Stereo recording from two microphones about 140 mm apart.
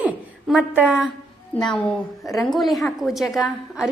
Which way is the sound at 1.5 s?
5° left (ahead or behind).